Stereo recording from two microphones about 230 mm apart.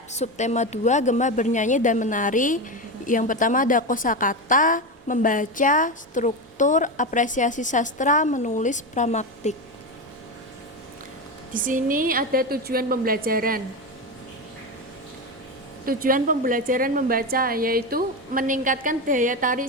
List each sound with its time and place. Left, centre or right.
0.1 s a woman's voice: left
11.5 s a woman's voice: right
15.9 s a woman's voice: right